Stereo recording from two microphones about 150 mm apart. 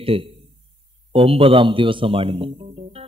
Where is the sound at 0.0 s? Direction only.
40° right (ahead or behind).